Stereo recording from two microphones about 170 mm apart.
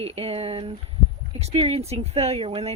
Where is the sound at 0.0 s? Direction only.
35° right (ahead or behind).